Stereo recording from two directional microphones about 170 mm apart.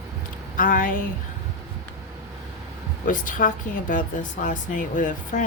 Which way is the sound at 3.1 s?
50° left (ahead or behind).